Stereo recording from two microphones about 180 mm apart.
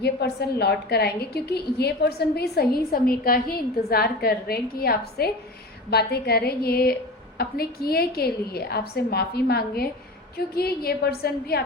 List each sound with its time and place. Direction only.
0.0 s a woman's voice: 65° left (ahead or behind)